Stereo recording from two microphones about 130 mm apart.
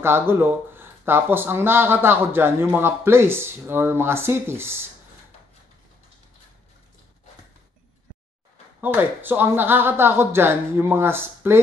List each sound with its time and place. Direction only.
0.0 s speech: 20° right (ahead or behind)
8.8 s speech: 15° right (ahead or behind)